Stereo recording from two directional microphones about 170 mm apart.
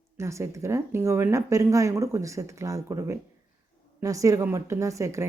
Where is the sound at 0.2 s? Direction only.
15° right (ahead or behind).